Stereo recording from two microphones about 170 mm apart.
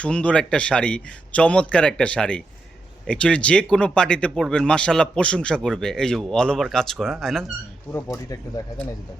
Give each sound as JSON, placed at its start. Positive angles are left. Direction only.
{"t": 0.0, "sound": "a man's voice", "side_deg": 5}
{"t": 8.1, "sound": "speech", "side_deg": 20}